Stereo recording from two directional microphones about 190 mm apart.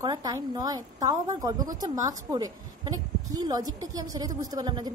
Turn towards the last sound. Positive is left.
turn(degrees=-20)  # may be behind; listen again after turning